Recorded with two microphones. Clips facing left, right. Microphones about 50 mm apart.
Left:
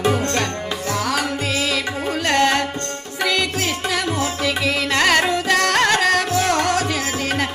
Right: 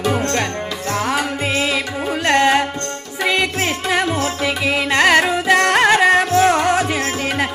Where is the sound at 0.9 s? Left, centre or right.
Right.